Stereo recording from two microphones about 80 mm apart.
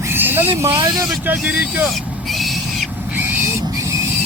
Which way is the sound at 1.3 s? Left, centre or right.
Right.